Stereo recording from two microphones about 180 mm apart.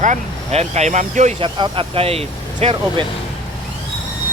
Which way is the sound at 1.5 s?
25° right (ahead or behind).